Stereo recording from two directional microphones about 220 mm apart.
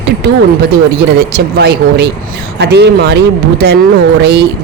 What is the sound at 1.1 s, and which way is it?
Speech, 45° right (ahead or behind).